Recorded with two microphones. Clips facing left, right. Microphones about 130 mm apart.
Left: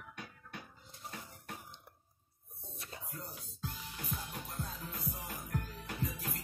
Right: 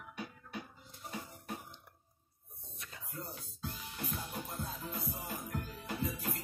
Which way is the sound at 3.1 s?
Centre (ahead or behind).